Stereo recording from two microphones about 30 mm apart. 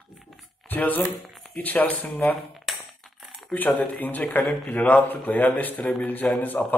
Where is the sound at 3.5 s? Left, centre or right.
Left.